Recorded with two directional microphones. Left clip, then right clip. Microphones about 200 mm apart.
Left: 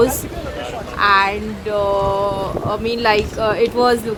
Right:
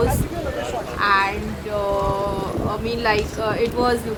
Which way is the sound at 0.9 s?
40° left (ahead or behind).